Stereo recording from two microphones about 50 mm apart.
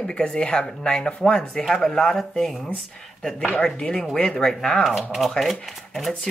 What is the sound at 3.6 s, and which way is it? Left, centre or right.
Speech, centre.